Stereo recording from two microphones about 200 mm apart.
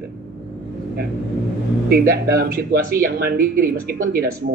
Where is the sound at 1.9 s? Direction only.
50° right (ahead or behind).